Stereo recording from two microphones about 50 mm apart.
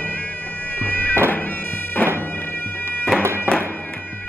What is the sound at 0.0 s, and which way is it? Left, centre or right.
Bagpipes, left.